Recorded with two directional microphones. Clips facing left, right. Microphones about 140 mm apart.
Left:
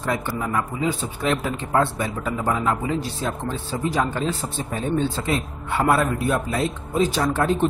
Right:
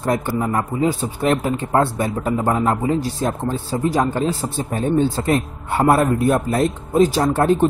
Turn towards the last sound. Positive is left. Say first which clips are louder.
# right 5 dB
turn(degrees=-45)  # may be behind; listen again after turning